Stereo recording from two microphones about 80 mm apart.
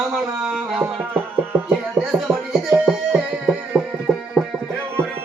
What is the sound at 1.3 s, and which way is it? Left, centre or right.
Music, right.